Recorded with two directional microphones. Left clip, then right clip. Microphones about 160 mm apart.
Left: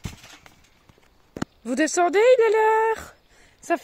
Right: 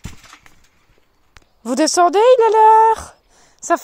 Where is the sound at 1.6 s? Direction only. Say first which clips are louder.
Right 8 dB; 20° right (ahead or behind).